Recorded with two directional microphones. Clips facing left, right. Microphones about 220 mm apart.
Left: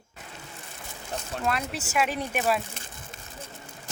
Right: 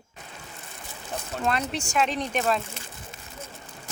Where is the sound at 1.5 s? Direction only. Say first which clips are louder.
Right 2 dB; 5° left (ahead or behind).